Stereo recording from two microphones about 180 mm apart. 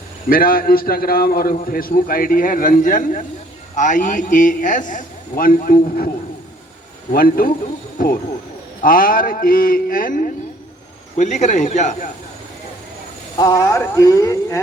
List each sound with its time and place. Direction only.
0.3 s a man's voice: 55° left (ahead or behind)
7.1 s a man's voice: 55° left (ahead or behind)
8.8 s a man's voice: 50° left (ahead or behind)
13.4 s speech: 20° left (ahead or behind)